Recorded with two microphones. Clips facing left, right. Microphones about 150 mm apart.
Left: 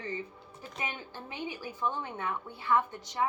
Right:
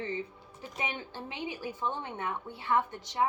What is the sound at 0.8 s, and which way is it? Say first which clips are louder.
A woman's voice: right 2 dB; 30° right (ahead or behind).